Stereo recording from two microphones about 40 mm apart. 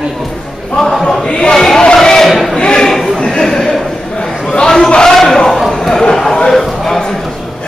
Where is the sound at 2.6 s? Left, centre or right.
Left.